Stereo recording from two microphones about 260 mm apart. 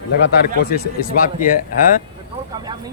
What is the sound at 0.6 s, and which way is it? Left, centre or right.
Speech, left.